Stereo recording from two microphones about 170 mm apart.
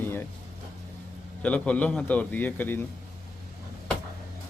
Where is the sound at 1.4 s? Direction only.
5° left (ahead or behind).